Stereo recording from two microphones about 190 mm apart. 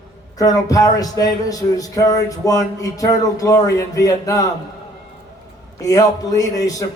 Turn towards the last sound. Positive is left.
turn(degrees=20)  # may be behind; listen again after turning